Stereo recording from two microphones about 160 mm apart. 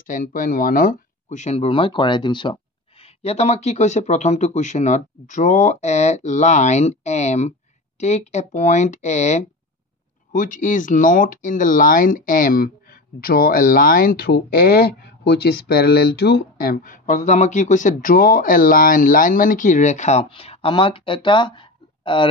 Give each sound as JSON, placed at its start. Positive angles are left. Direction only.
{"t": 0.0, "sound": "speech", "side_deg": 55}